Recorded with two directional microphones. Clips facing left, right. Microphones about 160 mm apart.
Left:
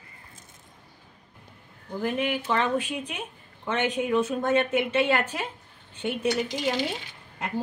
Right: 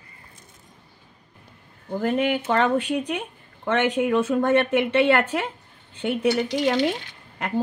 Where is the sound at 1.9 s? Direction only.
55° right (ahead or behind).